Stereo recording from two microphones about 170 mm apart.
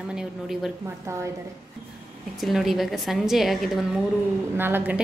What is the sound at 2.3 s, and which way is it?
A woman's voice, centre (ahead or behind).